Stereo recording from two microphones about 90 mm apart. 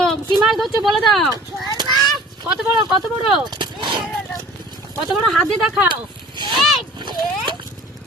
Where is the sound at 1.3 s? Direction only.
45° right (ahead or behind).